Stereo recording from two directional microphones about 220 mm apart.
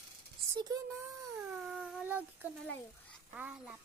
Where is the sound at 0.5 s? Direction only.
15° right (ahead or behind).